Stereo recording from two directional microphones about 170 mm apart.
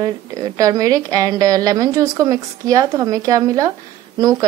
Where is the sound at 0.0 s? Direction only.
20° right (ahead or behind).